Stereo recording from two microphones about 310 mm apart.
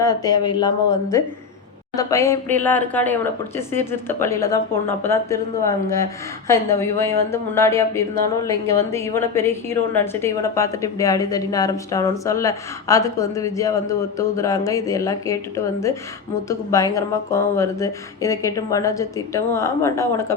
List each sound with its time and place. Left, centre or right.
0.0 s speech: centre